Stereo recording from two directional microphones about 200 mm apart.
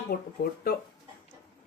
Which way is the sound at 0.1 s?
45° left (ahead or behind).